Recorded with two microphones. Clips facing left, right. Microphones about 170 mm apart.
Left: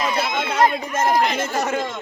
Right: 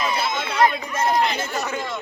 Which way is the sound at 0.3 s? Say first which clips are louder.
Left 1 dB; 50° left (ahead or behind).